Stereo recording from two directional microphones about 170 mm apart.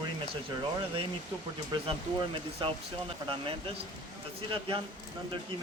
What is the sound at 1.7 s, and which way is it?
Speech, 30° right (ahead or behind).